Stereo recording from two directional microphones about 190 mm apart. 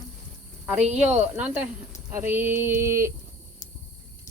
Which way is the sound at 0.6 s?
10° right (ahead or behind).